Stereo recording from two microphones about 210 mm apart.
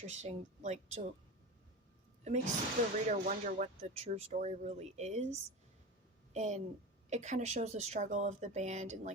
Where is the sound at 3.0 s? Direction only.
40° right (ahead or behind).